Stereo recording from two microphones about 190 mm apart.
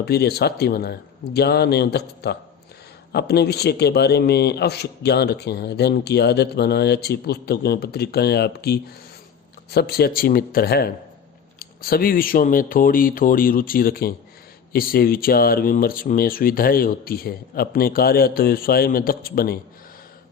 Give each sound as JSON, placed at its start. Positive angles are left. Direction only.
{"t": 0.0, "sound": "a man's voice", "side_deg": 55}